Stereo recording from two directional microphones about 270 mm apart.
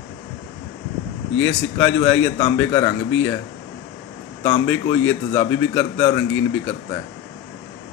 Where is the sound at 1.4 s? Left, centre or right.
Centre.